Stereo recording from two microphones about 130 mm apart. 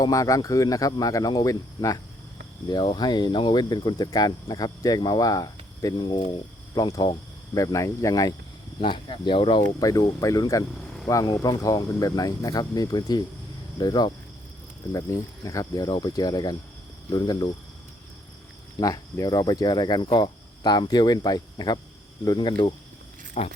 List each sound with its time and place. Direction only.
0.0 s speech: 25° left (ahead or behind)
2.6 s speech: 35° left (ahead or behind)
8.8 s speech: 40° left (ahead or behind)
9.6 s speech: 25° left (ahead or behind)
18.8 s speech: 30° left (ahead or behind)
23.4 s speech: 55° left (ahead or behind)